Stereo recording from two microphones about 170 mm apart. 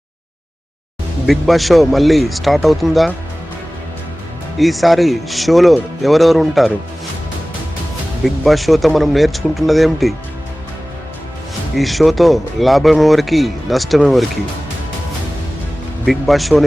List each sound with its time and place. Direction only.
1.3 s speech: centre (ahead or behind)
4.5 s speech: centre (ahead or behind)
8.2 s speech: centre (ahead or behind)
11.8 s speech: centre (ahead or behind)
16.0 s speech: centre (ahead or behind)